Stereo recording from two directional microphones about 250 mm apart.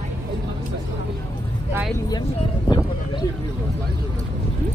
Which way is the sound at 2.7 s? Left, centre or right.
Centre.